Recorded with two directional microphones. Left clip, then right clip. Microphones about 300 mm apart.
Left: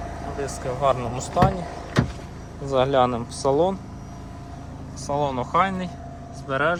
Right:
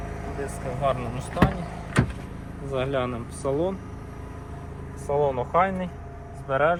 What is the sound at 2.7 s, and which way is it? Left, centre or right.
Speech, centre.